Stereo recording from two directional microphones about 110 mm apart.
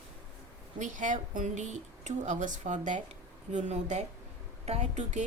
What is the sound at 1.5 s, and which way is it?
Speech, 90° right.